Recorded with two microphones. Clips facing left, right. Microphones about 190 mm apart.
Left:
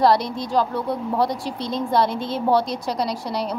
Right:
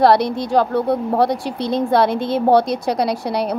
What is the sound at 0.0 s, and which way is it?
A woman's voice, 65° right (ahead or behind).